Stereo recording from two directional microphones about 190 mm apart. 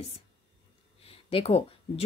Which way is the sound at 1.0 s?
30° left (ahead or behind).